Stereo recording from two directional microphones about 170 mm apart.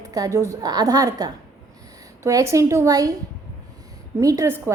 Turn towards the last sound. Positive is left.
turn(degrees=-15)  # may be behind; listen again after turning